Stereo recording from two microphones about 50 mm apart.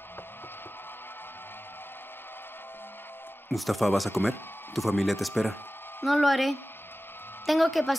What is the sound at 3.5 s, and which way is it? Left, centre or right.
Speech, centre.